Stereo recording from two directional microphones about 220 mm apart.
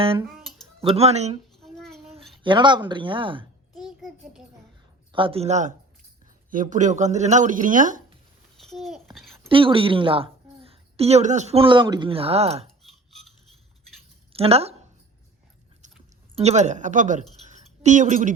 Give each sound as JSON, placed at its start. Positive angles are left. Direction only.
{"t": 0.0, "sound": "speech", "side_deg": -25}
{"t": 1.6, "sound": "a sound", "side_deg": 0}
{"t": 2.0, "sound": "speech", "side_deg": -25}
{"t": 3.8, "sound": "a sound", "side_deg": 0}
{"t": 5.1, "sound": "speech", "side_deg": -25}
{"t": 8.6, "sound": "babbling", "side_deg": 0}
{"t": 9.5, "sound": "a woman's voice", "side_deg": -25}
{"t": 12.8, "sound": "cutlery", "side_deg": 0}
{"t": 14.3, "sound": "speech", "side_deg": -25}
{"t": 16.4, "sound": "a woman's voice", "side_deg": -30}